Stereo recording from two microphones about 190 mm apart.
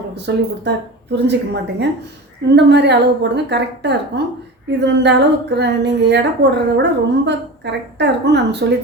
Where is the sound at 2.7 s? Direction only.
65° right (ahead or behind).